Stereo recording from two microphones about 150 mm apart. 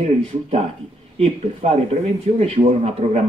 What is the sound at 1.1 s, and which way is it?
Speech, 45° right (ahead or behind).